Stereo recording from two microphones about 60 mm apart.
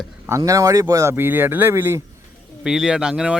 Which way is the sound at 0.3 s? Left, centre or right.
Right.